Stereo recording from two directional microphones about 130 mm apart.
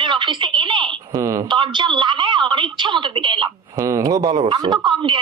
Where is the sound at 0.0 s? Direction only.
40° right (ahead or behind).